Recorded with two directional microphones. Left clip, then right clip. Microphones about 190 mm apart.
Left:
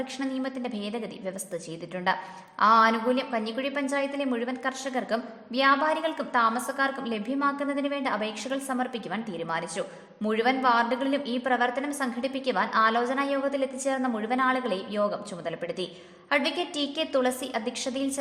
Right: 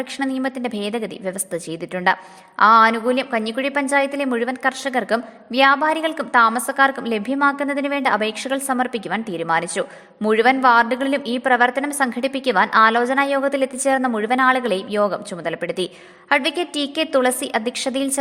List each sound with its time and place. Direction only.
0.0 s a woman's voice: 35° right (ahead or behind)